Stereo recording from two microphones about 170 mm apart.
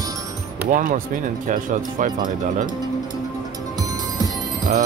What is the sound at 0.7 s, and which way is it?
Speech, 50° right (ahead or behind).